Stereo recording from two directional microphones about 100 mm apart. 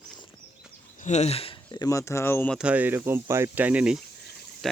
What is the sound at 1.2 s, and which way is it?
Speech, 85° left.